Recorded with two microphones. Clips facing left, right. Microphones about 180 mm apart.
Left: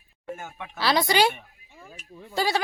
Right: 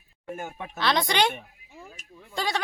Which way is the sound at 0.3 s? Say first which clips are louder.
Right 3 dB; 35° right (ahead or behind).